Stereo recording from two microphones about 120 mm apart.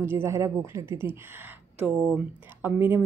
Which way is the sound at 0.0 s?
20° right (ahead or behind).